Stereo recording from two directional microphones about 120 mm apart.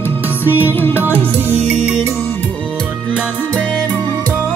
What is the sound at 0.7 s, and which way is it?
Music, 15° left (ahead or behind).